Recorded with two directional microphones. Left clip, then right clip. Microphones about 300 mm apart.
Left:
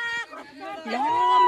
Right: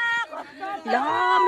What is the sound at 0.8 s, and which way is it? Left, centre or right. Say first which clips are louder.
Speech: right 1 dB; right.